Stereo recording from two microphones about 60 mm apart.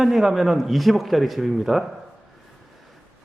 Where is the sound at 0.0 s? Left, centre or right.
Centre.